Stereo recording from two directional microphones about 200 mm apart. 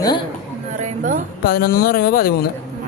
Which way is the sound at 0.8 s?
40° right (ahead or behind).